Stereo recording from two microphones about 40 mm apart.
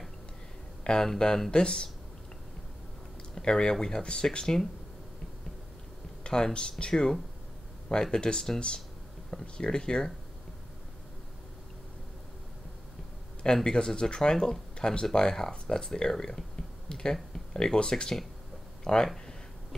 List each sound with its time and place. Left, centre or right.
0.8 s speech: centre
3.3 s speech: centre
6.2 s speech: left
13.7 s speech: centre